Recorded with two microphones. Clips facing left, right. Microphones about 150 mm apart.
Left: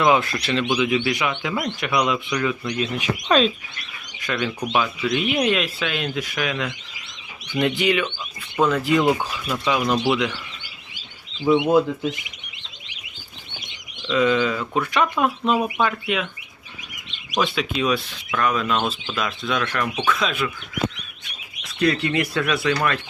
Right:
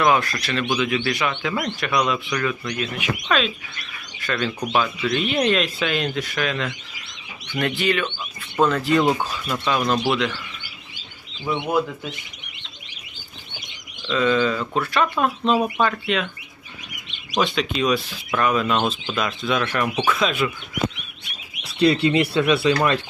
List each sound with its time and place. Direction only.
0.0 s speech: 20° left (ahead or behind)
0.6 s speech: 10° left (ahead or behind)
3.0 s speech: 35° left (ahead or behind)
4.2 s speech: 15° left (ahead or behind)
4.6 s speech: centre (ahead or behind)
11.4 s speech: 10° left (ahead or behind)
14.1 s speech: 10° left (ahead or behind)
17.3 s speech: 5° left (ahead or behind)
21.6 s speech: 30° right (ahead or behind)